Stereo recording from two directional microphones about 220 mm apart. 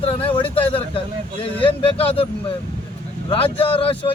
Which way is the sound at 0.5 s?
25° left (ahead or behind).